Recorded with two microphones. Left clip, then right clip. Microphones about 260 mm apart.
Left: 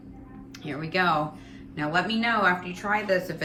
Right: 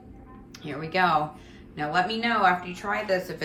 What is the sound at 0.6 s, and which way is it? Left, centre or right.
A woman's voice, centre.